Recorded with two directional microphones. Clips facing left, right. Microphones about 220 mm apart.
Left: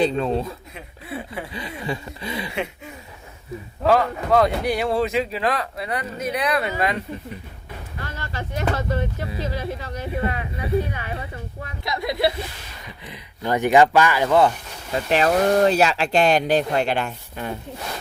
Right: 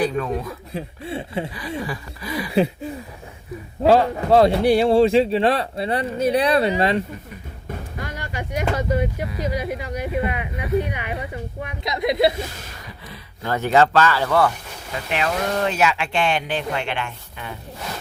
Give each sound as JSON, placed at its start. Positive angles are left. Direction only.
{"t": 0.0, "sound": "a sound", "side_deg": 25}
{"t": 0.7, "sound": "speech", "side_deg": -30}
{"t": 1.8, "sound": "a sound", "side_deg": 25}
{"t": 3.8, "sound": "speech", "side_deg": -30}
{"t": 8.0, "sound": "speech", "side_deg": -15}
{"t": 13.1, "sound": "speech", "side_deg": 15}
{"t": 14.9, "sound": "speech", "side_deg": 35}